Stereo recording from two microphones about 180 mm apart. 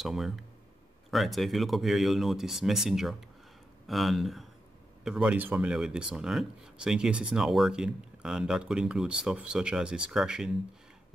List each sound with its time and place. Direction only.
0.0 s speech: centre (ahead or behind)